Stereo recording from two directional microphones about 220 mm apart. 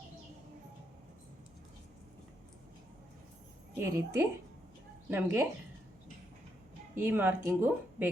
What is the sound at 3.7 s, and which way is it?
A woman's voice, 10° right (ahead or behind).